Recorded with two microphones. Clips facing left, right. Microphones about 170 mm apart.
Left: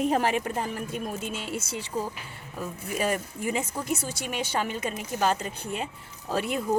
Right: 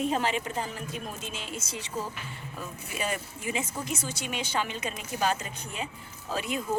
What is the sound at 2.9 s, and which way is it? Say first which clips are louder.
Speech: left 6 dB; 45° left (ahead or behind).